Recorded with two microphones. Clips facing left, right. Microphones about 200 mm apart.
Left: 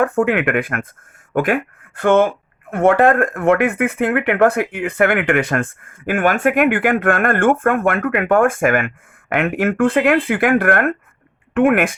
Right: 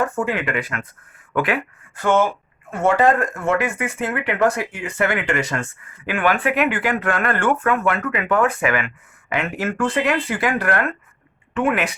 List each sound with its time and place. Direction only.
0.0 s speech: 60° left (ahead or behind)